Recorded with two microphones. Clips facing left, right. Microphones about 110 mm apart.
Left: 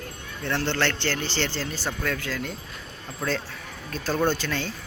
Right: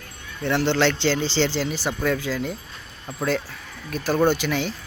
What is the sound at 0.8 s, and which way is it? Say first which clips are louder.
Speech: right 6 dB; 90° right.